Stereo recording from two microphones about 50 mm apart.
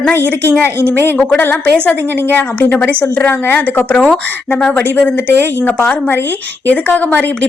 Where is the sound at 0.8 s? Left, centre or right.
Left.